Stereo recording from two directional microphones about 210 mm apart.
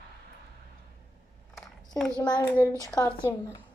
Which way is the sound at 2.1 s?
20° left (ahead or behind).